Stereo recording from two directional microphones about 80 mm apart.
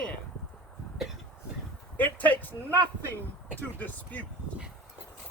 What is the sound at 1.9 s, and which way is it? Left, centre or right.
Speech, left.